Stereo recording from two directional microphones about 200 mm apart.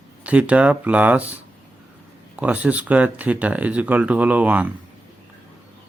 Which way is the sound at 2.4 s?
5° right (ahead or behind).